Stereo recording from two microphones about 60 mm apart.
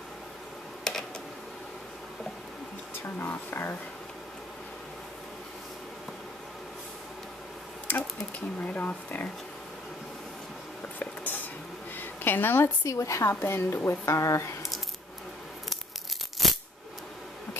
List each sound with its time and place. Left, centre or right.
3.2 s speech: left
7.9 s a sound: left
8.5 s speech: left
11.0 s a sound: left
12.8 s a woman's voice: left
13.8 s speech: left